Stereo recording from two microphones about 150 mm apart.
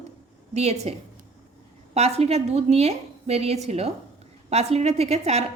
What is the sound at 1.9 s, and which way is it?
A woman's voice, 45° right (ahead or behind).